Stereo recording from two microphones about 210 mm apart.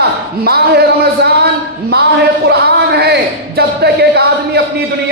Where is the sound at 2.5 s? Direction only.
50° right (ahead or behind).